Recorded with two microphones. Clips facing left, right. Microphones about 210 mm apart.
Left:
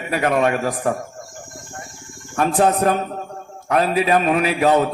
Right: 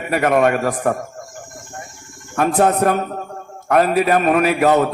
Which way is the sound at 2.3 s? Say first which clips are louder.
Right 1 dB; 55° right (ahead or behind).